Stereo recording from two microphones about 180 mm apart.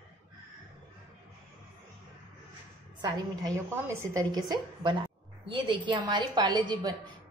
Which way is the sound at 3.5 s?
15° right (ahead or behind).